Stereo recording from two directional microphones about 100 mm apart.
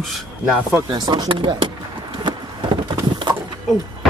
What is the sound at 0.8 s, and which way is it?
Speech, 40° right (ahead or behind).